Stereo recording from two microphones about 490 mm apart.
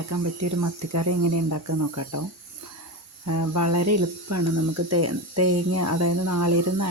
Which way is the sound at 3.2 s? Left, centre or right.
Right.